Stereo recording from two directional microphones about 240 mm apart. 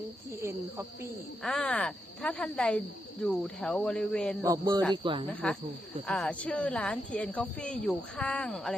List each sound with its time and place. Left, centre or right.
1.4 s speech: centre
4.4 s speech: centre
5.4 s speech: centre